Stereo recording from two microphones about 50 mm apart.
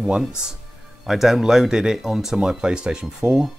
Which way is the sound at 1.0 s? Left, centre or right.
Centre.